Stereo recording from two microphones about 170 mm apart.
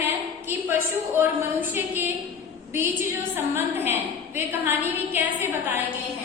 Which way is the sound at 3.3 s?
10° right (ahead or behind).